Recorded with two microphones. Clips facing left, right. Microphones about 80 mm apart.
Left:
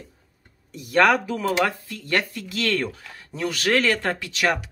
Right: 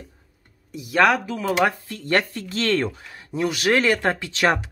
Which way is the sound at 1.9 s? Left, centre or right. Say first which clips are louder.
Right 3 dB; right.